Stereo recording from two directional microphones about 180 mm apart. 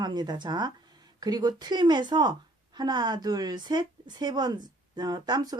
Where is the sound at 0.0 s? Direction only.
25° right (ahead or behind).